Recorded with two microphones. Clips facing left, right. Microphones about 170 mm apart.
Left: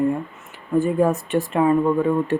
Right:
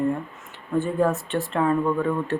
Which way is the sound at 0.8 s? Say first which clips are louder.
Left 3 dB; 15° left (ahead or behind).